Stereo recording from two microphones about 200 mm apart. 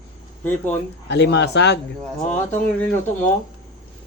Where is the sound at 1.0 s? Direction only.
55° left (ahead or behind).